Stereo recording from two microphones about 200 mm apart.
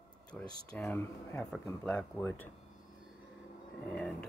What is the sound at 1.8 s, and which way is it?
Speech, centre (ahead or behind).